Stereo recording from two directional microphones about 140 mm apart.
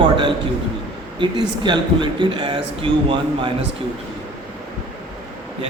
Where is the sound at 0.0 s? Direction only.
35° right (ahead or behind).